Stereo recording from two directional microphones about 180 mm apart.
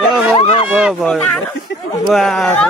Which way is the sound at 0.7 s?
Centre (ahead or behind).